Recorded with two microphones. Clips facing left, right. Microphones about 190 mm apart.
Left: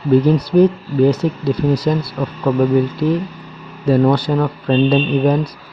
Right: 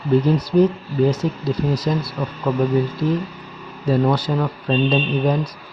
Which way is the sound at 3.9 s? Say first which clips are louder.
Left 5 dB; 65° left (ahead or behind).